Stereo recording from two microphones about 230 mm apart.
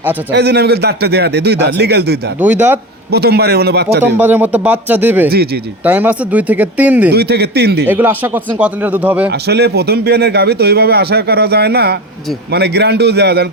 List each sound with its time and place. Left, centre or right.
0.3 s speech: right
2.4 s speech: centre
3.1 s speech: right
4.2 s speech: centre
7.1 s speech: right
7.9 s speech: centre
9.5 s speech: right